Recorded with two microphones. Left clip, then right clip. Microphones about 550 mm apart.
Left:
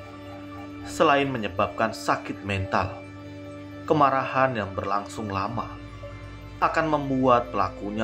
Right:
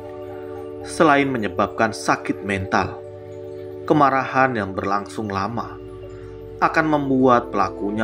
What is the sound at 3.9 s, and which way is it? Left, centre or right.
Speech, centre.